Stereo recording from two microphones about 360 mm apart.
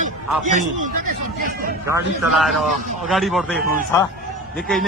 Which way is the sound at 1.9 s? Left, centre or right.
Centre.